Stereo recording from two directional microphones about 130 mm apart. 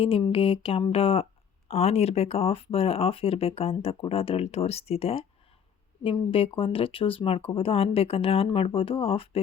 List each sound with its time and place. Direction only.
0.0 s speech: 45° left (ahead or behind)